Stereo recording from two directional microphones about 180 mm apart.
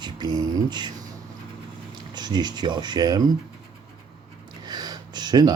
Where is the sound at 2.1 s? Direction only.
25° right (ahead or behind).